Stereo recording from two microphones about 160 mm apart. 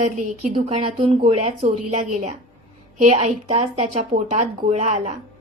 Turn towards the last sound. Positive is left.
turn(degrees=-45)  # may be behind; listen again after turning